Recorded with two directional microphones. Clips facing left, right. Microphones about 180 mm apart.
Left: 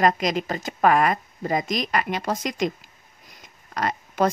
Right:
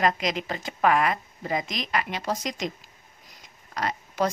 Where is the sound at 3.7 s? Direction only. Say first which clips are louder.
Left 3 dB; 50° left (ahead or behind).